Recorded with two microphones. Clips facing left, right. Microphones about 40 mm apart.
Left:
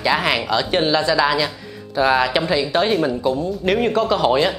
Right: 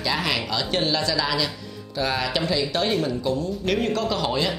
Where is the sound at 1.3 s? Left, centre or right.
Centre.